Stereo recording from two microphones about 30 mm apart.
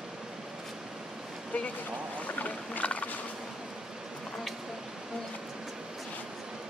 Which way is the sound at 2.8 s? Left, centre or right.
Left.